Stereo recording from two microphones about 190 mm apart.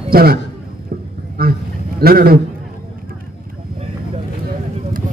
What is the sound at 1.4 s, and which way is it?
Speech, 50° right (ahead or behind).